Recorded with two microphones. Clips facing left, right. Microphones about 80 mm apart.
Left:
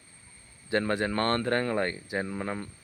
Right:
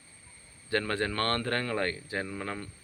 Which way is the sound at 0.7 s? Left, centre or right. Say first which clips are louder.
Left 3 dB; centre.